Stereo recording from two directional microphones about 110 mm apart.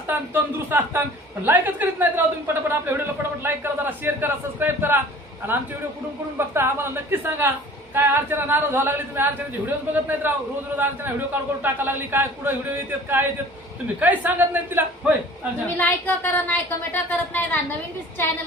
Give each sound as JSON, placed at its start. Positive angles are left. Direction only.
{"t": 0.3, "sound": "a woman's voice", "side_deg": -20}
{"t": 6.3, "sound": "a woman's voice", "side_deg": -20}
{"t": 11.6, "sound": "a woman's voice", "side_deg": -20}
{"t": 13.9, "sound": "a man's voice", "side_deg": -15}
{"t": 15.8, "sound": "a woman's voice", "side_deg": 15}